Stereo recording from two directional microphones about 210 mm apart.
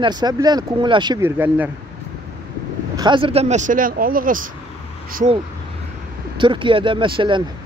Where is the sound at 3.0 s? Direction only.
25° right (ahead or behind).